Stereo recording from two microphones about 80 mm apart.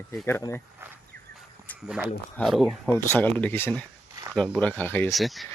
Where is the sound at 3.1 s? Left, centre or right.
Left.